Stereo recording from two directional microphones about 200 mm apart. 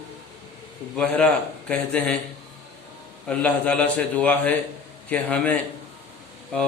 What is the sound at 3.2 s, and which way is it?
A man's voice, 5° left (ahead or behind).